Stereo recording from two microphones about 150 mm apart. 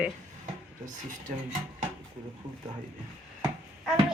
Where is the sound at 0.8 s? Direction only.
60° right (ahead or behind).